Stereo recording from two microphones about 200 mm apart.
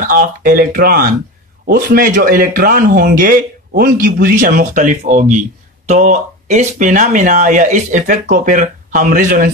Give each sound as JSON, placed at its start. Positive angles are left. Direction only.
{"t": 0.0, "sound": "speech", "side_deg": -45}